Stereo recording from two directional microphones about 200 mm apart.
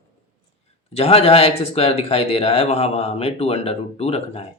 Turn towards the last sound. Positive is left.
turn(degrees=30)  # may be behind; listen again after turning